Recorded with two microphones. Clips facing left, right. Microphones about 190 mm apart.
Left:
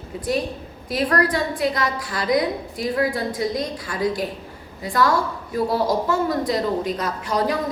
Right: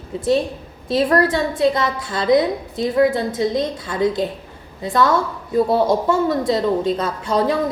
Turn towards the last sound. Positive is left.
turn(degrees=-25)  # may be behind; listen again after turning